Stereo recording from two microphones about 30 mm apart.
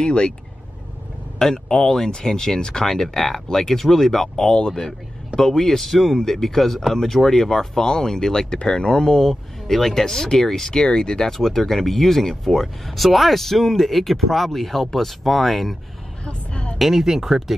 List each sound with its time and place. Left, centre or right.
0.0 s speech: left
1.4 s speech: centre
2.9 s speech: centre
4.5 s speech: left
4.7 s a man's voice: centre
7.2 s speech: centre
10.7 s speech: left
11.3 s speech: centre
16.3 s vehicle: left
16.7 s speech: centre
17.0 s speech: centre